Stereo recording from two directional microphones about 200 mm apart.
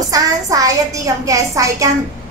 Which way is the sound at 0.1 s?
15° right (ahead or behind).